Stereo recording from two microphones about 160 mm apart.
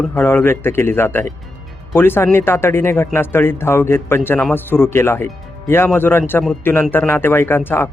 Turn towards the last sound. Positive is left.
turn(degrees=15)  # may be behind; listen again after turning